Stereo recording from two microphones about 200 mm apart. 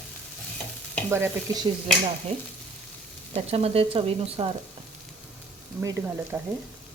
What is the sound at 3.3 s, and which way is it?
Speech, 30° right (ahead or behind).